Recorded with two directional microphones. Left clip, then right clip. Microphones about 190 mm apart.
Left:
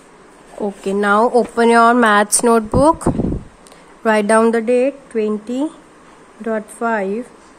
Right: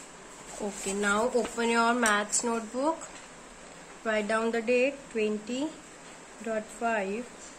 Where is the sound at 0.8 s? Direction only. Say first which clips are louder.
Left 14 dB; 55° left (ahead or behind).